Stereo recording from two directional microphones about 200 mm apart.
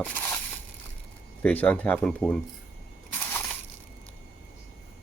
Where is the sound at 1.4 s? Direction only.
5° left (ahead or behind).